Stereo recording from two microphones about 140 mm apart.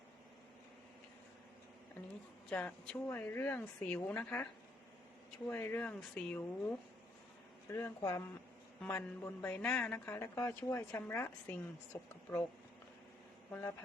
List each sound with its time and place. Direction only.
2.5 s a woman's voice: 10° left (ahead or behind)
5.5 s a woman's voice: 15° left (ahead or behind)
7.7 s a woman's voice: 20° left (ahead or behind)
13.5 s a woman's voice: 15° left (ahead or behind)